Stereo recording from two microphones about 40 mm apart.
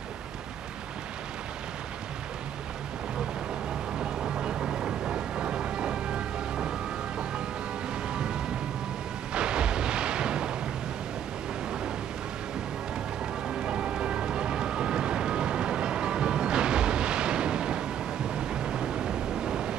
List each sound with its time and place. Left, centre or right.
4.4 s thunder: centre
8.1 s a sound: right
13.5 s vehicle: right
18.3 s waves: right